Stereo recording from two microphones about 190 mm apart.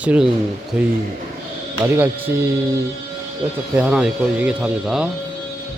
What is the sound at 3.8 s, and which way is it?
Speech, 5° right (ahead or behind).